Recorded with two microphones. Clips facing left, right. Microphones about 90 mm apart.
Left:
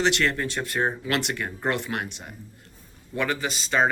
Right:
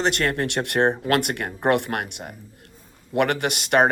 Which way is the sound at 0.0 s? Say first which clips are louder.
Right 1 dB; 45° right (ahead or behind).